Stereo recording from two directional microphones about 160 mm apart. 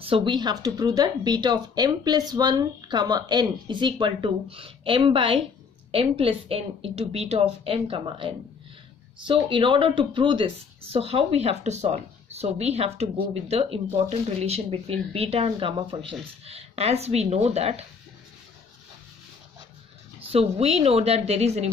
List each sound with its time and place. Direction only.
0.0 s speech: 35° right (ahead or behind)
20.2 s speech: 40° right (ahead or behind)